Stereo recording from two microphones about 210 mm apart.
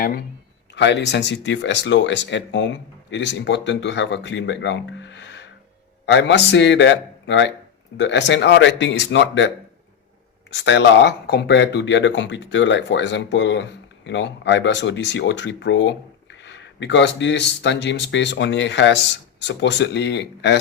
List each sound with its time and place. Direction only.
0.7 s speech: 55° left (ahead or behind)
10.5 s speech: 55° left (ahead or behind)